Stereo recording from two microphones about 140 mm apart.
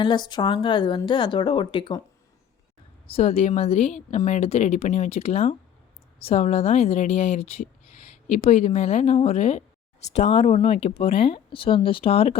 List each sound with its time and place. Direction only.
0.0 s speech: 35° left (ahead or behind)
3.1 s speech: 45° left (ahead or behind)